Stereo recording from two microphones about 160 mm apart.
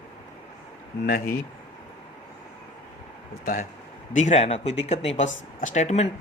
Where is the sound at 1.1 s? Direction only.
70° left (ahead or behind).